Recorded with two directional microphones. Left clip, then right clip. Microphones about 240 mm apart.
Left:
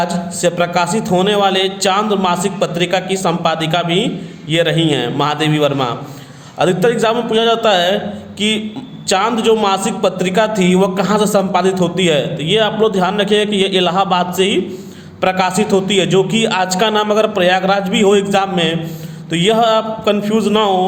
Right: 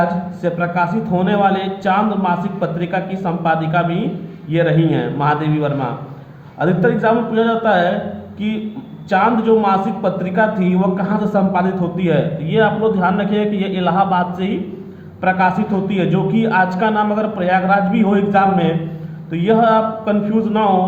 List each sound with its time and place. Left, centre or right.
0.0 s a man's voice: left
9.0 s a man's voice: left